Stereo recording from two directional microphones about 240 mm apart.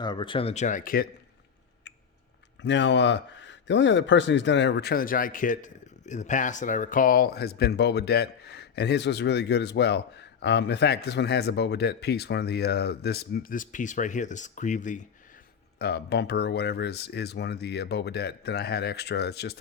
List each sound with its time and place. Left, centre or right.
0.0 s speech: centre; by 1.0 s left
2.6 s speech: left
15.8 s speech: left